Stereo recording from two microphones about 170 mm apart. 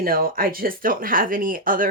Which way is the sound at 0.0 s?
60° right (ahead or behind).